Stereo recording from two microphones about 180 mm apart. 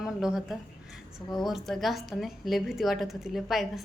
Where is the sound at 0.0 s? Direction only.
5° right (ahead or behind).